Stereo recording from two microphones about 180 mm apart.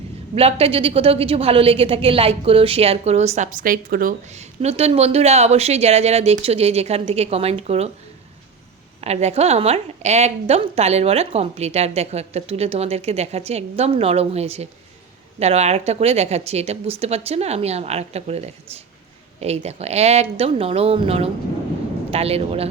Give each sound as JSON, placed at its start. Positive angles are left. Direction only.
{"t": 0.3, "sound": "a woman's voice", "side_deg": -35}
{"t": 4.4, "sound": "a woman's voice", "side_deg": -35}
{"t": 9.0, "sound": "a woman's voice", "side_deg": -35}